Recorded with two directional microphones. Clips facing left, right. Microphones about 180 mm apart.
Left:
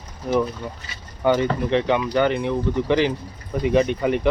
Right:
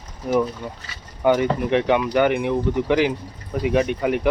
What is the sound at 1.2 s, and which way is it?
Speech, 10° right (ahead or behind).